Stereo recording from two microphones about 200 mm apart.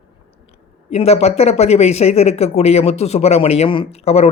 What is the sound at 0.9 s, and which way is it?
Speech, 30° left (ahead or behind).